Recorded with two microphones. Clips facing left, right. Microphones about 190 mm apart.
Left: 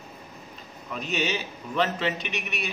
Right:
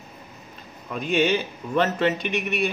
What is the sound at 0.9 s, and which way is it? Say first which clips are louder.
A man's voice: right 7 dB; 50° right (ahead or behind).